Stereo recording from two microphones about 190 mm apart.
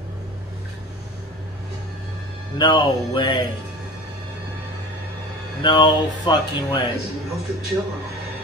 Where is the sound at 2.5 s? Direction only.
25° left (ahead or behind).